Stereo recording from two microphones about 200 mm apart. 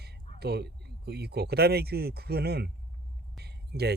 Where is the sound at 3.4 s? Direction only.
55° right (ahead or behind).